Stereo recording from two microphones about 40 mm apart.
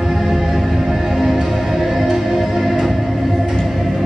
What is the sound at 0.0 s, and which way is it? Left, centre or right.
Music, centre.